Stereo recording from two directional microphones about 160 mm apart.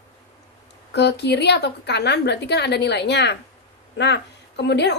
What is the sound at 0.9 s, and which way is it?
A woman's voice, 90° left.